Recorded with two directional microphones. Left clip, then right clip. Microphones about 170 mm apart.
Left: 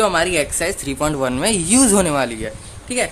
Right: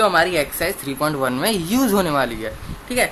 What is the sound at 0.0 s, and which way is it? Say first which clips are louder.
A woman's voice: even; 35° left (ahead or behind).